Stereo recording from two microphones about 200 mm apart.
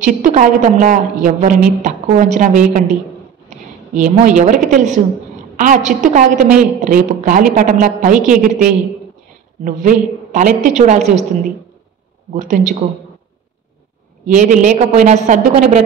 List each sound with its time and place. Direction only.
0.0 s a woman's voice: 40° right (ahead or behind)
9.7 s a woman's voice: 40° right (ahead or behind)
12.3 s a woman's voice: 40° right (ahead or behind)
14.2 s a woman's voice: 40° right (ahead or behind)